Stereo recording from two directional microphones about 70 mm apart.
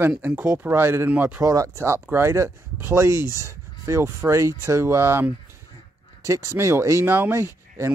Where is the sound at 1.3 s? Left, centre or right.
Right.